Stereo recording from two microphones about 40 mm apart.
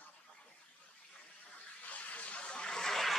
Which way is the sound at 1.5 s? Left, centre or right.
Left.